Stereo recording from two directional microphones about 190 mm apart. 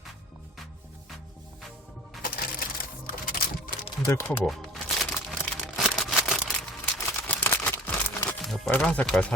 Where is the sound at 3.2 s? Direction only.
50° left (ahead or behind).